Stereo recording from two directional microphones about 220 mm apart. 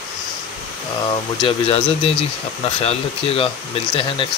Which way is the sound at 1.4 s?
25° left (ahead or behind).